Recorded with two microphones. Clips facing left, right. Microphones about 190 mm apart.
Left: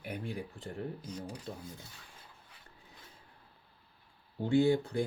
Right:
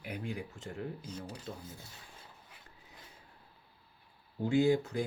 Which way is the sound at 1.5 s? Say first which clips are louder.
Right 1 dB; 50° left (ahead or behind).